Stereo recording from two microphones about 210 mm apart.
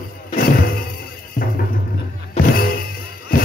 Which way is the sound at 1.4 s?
40° left (ahead or behind).